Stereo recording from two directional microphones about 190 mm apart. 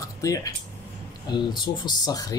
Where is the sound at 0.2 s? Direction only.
20° left (ahead or behind).